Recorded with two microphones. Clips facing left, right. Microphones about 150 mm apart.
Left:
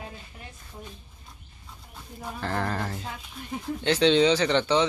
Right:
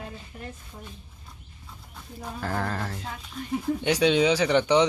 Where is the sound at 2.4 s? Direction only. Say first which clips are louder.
Left 1 dB; 5° right (ahead or behind).